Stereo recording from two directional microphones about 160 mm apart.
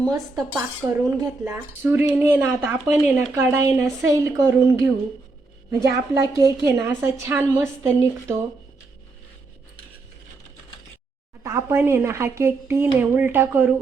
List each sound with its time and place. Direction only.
0.1 s speech: 20° right (ahead or behind)
6.1 s a woman's voice: 20° right (ahead or behind)
11.4 s speech: 15° right (ahead or behind)